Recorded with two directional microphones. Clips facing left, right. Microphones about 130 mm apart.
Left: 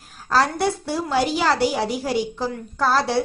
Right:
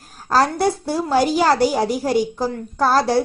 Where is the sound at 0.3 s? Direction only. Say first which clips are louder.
Right 3 dB; 40° right (ahead or behind).